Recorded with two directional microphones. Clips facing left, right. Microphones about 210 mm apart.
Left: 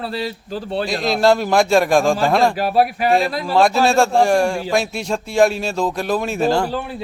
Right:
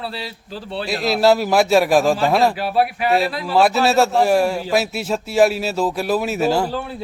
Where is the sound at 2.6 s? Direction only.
40° left (ahead or behind).